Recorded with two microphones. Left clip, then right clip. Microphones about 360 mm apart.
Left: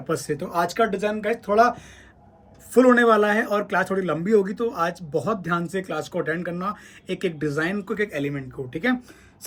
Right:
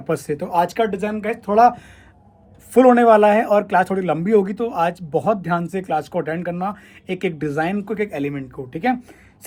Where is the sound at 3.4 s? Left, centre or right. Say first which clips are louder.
Right 7 dB; centre.